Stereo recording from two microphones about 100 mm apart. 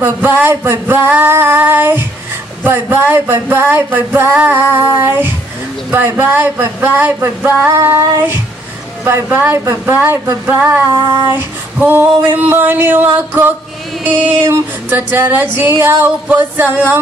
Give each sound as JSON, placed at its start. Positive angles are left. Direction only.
{"t": 0.0, "sound": "female singing", "side_deg": -20}
{"t": 14.0, "sound": "music", "side_deg": -15}
{"t": 14.5, "sound": "female singing", "side_deg": -20}